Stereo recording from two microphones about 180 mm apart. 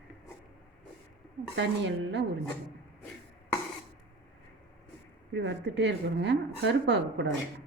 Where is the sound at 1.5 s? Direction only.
75° right (ahead or behind).